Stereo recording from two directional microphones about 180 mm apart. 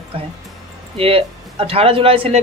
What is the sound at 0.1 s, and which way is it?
Speech, 30° right (ahead or behind).